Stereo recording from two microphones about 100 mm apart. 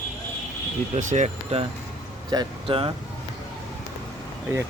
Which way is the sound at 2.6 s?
70° right (ahead or behind).